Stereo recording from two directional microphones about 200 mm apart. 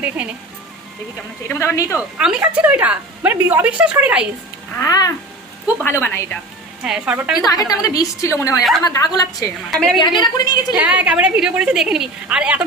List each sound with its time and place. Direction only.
0.2 s a woman's voice: 5° right (ahead or behind)
1.5 s a woman's voice: 10° left (ahead or behind)
2.1 s a woman's voice: 5° right (ahead or behind)
4.8 s a woman's voice: 20° left (ahead or behind)
6.8 s a woman's voice: 5° right (ahead or behind)
7.5 s a woman's voice: 20° left (ahead or behind)
9.7 s a woman's voice: centre (ahead or behind)
10.0 s a woman's voice: 20° left (ahead or behind)
10.8 s a woman's voice: 5° right (ahead or behind)